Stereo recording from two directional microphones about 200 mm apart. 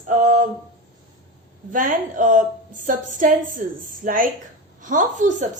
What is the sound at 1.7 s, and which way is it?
A woman's voice, 40° right (ahead or behind).